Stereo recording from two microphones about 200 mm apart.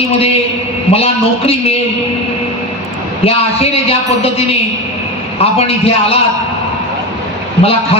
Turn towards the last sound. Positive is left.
turn(degrees=30)  # may be behind; listen again after turning